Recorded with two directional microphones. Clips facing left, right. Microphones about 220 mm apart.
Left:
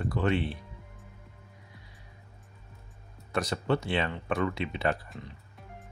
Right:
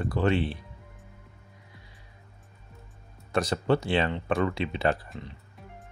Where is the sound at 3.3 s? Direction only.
30° right (ahead or behind).